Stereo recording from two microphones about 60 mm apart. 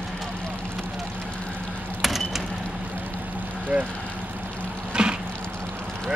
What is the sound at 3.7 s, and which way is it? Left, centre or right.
Speech, centre.